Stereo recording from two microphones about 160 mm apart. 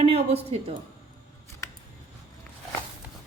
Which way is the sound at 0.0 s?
35° right (ahead or behind).